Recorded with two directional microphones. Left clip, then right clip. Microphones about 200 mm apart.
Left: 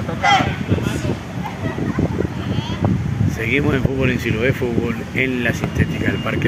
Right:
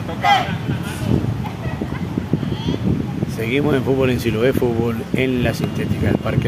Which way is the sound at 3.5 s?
10° right (ahead or behind).